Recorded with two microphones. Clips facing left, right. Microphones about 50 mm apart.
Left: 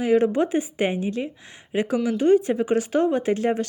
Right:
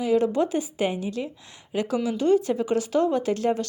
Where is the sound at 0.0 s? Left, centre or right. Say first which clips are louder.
Left 2 dB; left.